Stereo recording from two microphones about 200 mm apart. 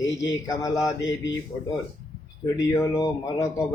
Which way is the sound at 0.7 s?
Centre (ahead or behind).